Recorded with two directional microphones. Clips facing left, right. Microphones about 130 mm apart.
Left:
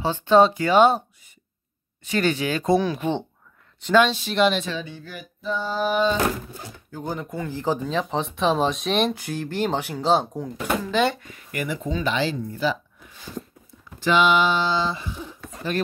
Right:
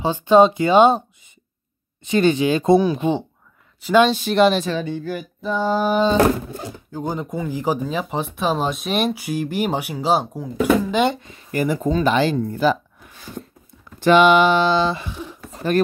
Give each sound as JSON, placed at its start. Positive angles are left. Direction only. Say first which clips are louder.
{"t": 0.0, "sound": "speech", "louder": "right 3 dB", "side_deg": -15}
{"t": 4.1, "sound": "a sound", "louder": "right 5 dB", "side_deg": -50}
{"t": 6.9, "sound": "speech", "louder": "right 4 dB", "side_deg": -20}
{"t": 13.9, "sound": "speech", "louder": "right 6 dB", "side_deg": -55}